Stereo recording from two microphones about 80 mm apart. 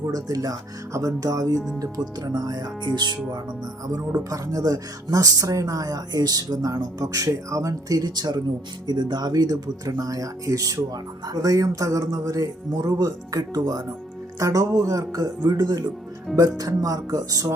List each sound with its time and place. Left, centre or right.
0.0 s speech: right
4.2 s speech: right